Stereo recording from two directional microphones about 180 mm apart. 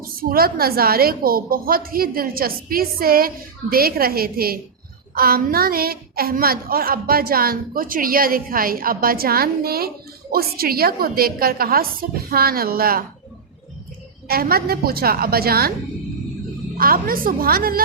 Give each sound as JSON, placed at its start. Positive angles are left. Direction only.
{"t": 0.2, "sound": "a woman's voice", "side_deg": -55}
{"t": 14.3, "sound": "a woman's voice", "side_deg": -55}
{"t": 16.7, "sound": "a woman's voice", "side_deg": -55}